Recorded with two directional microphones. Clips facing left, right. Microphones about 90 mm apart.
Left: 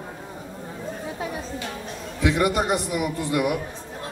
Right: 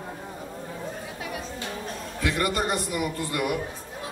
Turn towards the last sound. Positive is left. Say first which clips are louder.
# left 4 dB
turn(degrees=15)  # may be behind; listen again after turning